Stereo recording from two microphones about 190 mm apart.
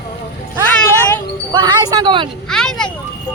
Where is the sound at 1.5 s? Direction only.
25° right (ahead or behind).